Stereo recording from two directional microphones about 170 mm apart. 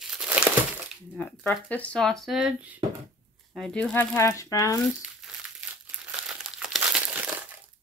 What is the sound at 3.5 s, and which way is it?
Speech, 5° left (ahead or behind).